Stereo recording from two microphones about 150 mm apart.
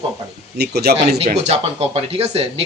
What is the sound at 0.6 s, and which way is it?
Speech, 90° right.